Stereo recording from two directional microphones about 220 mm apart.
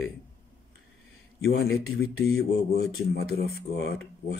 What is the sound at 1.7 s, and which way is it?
Speech, 65° left (ahead or behind).